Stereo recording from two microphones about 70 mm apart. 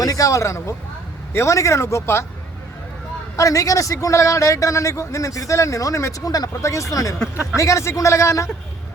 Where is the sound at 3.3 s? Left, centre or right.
Left.